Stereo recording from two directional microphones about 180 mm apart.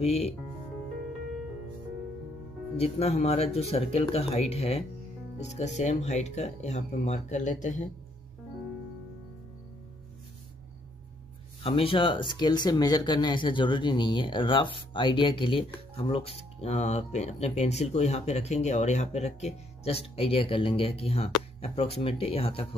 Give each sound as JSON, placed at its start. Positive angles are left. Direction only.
{"t": 0.0, "sound": "speech", "side_deg": 35}
{"t": 2.8, "sound": "speech", "side_deg": 35}
{"t": 11.6, "sound": "speech", "side_deg": 30}